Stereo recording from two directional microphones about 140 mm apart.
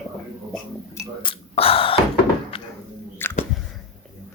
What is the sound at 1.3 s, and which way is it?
Gasp, 40° left (ahead or behind).